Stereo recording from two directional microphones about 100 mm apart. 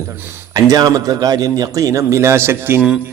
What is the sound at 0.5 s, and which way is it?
A man's voice, 40° right (ahead or behind).